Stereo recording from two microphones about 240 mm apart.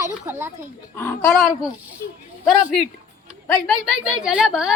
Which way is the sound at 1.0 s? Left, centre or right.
Centre.